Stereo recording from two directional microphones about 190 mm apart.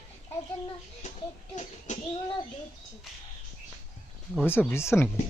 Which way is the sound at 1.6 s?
35° left (ahead or behind).